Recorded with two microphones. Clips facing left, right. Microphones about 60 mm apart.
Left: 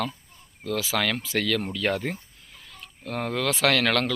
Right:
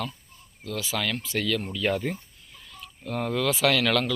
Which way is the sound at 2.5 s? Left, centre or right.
Left.